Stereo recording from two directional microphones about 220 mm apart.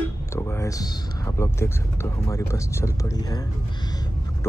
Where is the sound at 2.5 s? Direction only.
10° left (ahead or behind).